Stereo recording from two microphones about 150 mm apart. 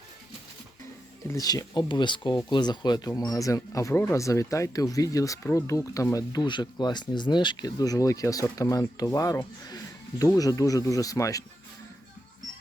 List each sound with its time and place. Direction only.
1.3 s speech: 25° left (ahead or behind)